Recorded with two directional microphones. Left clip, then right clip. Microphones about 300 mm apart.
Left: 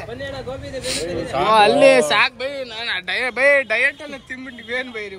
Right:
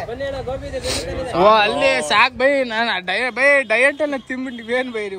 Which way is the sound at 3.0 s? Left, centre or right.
Centre.